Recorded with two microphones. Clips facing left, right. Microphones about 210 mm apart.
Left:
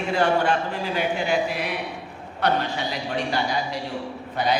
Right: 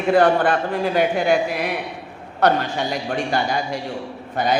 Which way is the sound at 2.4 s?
45° right (ahead or behind).